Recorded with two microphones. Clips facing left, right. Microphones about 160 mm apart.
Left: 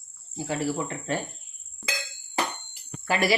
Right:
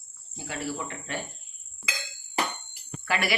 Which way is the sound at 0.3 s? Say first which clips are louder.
Left 7 dB; 35° left (ahead or behind).